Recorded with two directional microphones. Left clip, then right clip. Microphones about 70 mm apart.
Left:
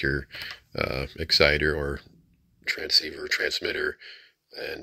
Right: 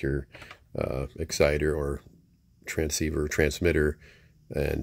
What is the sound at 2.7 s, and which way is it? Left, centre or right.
Speech, right.